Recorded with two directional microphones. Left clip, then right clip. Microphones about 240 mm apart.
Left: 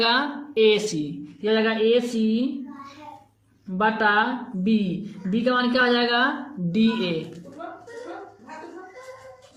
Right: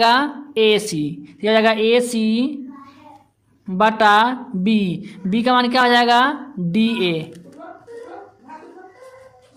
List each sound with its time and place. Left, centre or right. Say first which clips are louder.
0.0 s a woman's voice: right 6 dB; right
3.8 s a woman's voice: right 7 dB; right